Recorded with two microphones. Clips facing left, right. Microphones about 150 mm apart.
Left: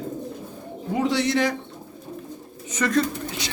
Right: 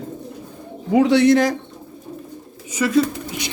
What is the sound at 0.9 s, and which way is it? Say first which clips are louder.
Speech: right 9 dB; 70° right (ahead or behind).